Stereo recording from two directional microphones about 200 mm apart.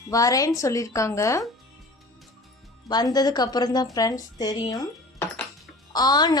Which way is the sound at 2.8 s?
20° left (ahead or behind).